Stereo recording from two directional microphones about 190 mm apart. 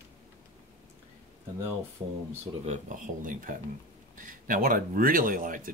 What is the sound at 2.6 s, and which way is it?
Speech, 40° right (ahead or behind).